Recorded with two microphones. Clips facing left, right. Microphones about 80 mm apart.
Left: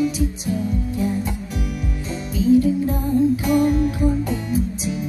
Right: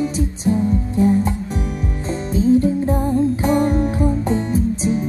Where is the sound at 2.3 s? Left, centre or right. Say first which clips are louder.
Right 1 dB; right.